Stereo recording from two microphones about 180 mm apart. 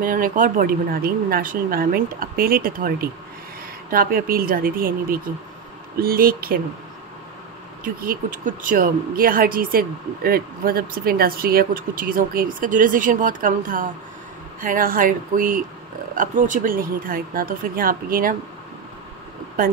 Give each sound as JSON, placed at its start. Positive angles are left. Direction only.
{"t": 0.0, "sound": "speech", "side_deg": -50}
{"t": 7.8, "sound": "speech", "side_deg": -50}